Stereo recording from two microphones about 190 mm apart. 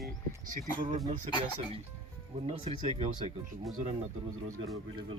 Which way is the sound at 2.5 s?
30° right (ahead or behind).